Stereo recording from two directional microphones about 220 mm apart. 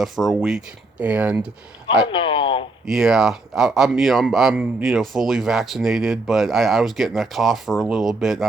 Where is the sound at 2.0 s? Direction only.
25° left (ahead or behind).